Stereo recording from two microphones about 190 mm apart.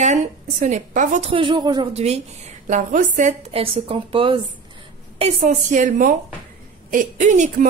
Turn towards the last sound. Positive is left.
turn(degrees=-40)  # may be behind; listen again after turning